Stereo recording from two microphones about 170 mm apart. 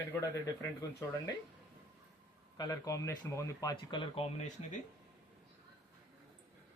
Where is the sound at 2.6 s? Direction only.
20° left (ahead or behind); by 4.8 s 40° left (ahead or behind).